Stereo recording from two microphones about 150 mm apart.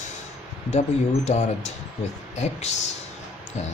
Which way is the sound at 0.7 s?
50° left (ahead or behind).